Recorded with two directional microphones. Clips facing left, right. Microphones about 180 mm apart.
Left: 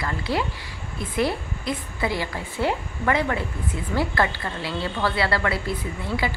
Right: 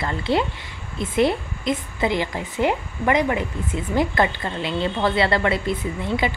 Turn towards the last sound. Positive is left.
turn(degrees=-20)  # may be behind; listen again after turning